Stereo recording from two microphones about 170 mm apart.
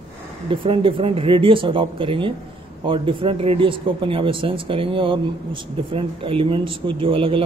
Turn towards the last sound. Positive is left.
turn(degrees=-30)  # may be behind; listen again after turning